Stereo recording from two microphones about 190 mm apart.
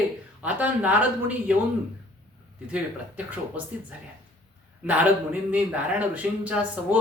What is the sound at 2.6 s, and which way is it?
A man's voice, 5° right (ahead or behind).